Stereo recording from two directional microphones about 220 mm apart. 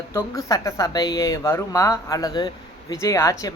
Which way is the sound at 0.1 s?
15° left (ahead or behind).